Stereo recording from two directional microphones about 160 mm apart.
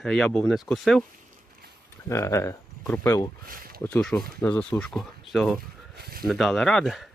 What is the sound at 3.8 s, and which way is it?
Speech, 5° left (ahead or behind).